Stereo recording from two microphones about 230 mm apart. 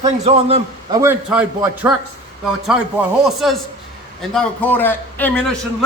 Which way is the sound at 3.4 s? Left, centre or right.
Centre.